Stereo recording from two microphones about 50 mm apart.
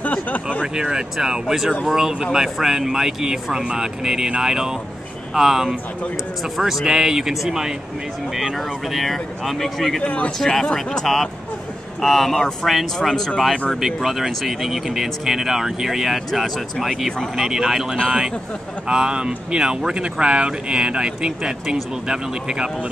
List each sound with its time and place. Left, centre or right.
0.0 s vehicle: left
0.7 s speech: centre
10.0 s speech: left
10.4 s speech: centre
12.0 s speech: centre
17.4 s speech: centre